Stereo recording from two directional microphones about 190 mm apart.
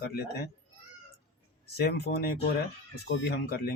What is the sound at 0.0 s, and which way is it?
Speech, 55° left (ahead or behind).